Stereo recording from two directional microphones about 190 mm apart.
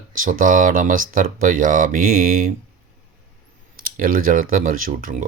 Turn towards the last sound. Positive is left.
turn(degrees=-45)  # may be behind; listen again after turning